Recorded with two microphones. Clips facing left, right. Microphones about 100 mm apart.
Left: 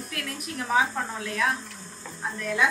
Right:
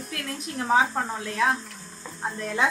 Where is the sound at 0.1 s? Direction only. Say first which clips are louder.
Right 3 dB; 30° right (ahead or behind).